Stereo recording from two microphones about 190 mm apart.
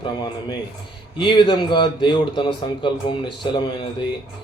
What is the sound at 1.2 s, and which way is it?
A man's voice, 25° left (ahead or behind).